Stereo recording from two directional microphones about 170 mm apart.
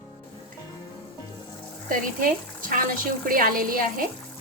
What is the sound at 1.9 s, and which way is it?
A woman's voice, 55° right (ahead or behind).